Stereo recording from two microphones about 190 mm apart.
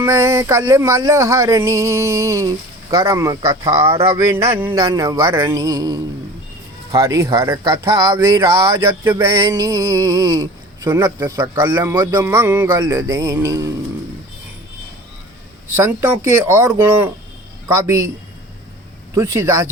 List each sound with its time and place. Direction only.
0.0 s speech: 15° right (ahead or behind)
15.7 s speech: 15° right (ahead or behind)
19.1 s speech: 15° right (ahead or behind)